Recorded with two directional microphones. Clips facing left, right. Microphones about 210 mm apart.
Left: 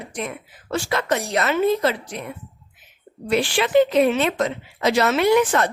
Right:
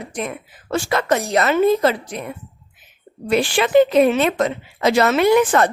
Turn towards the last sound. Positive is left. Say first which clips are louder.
# right 3 dB
turn(degrees=-50)  # may be behind; listen again after turning